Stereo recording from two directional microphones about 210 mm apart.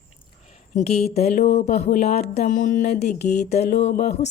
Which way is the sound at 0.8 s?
30° left (ahead or behind).